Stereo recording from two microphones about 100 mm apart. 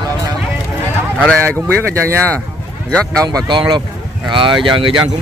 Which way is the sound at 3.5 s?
50° right (ahead or behind).